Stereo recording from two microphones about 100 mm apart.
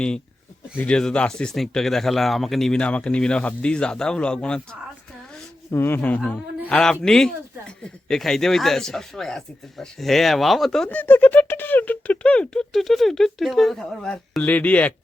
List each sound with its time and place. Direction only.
0.8 s speech: 10° left (ahead or behind)
5.7 s speech: 25° left (ahead or behind); by 10.8 s 5° left (ahead or behind)
10.8 s speech: 20° left (ahead or behind)